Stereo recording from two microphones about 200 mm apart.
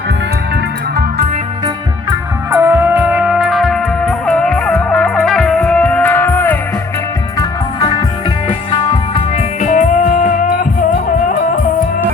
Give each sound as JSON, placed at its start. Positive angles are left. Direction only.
{"t": 2.5, "sound": "music", "side_deg": -10}
{"t": 8.4, "sound": "music", "side_deg": 25}